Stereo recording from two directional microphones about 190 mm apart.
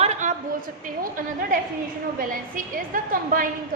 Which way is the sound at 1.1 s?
45° right (ahead or behind).